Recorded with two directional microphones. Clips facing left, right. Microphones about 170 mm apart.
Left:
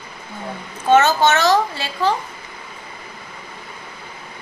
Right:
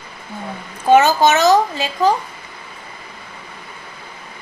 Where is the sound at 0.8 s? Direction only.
15° right (ahead or behind).